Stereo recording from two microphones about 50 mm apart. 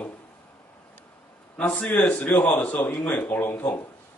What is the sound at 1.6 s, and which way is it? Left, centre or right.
Speech, left.